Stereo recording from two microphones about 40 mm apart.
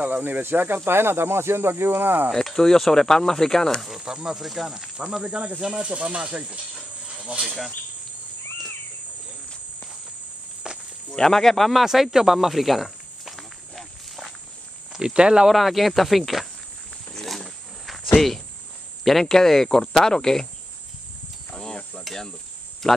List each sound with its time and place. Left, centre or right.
0.0 s speech: right
2.3 s speech: centre
4.0 s speech: centre
4.4 s speech: centre
5.2 s speech: right
6.7 s a sound: right
7.4 s speech: centre
11.1 s speech: centre
11.8 s snake: centre
14.9 s speech: centre
15.5 s speech: centre
17.3 s wild animals: centre
19.0 s speech: centre
22.1 s cricket: centre